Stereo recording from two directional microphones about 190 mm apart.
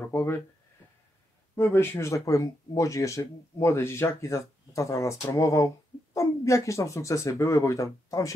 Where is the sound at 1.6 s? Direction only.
15° left (ahead or behind).